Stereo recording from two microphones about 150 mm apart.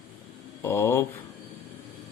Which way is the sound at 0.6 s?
15° left (ahead or behind).